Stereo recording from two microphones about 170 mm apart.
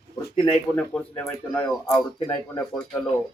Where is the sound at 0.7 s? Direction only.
5° left (ahead or behind).